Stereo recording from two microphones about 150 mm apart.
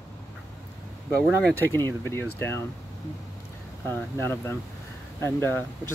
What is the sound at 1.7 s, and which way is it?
Speech, 15° left (ahead or behind).